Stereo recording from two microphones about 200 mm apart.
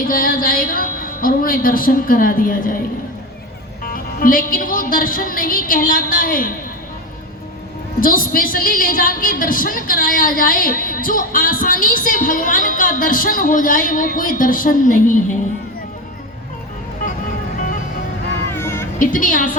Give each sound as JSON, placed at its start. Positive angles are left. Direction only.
{"t": 0.1, "sound": "a woman's voice", "side_deg": 45}
{"t": 3.8, "sound": "a woman's voice", "side_deg": 45}
{"t": 8.0, "sound": "a woman's voice", "side_deg": 45}
{"t": 18.5, "sound": "music", "side_deg": 10}
{"t": 18.9, "sound": "a woman's voice", "side_deg": 40}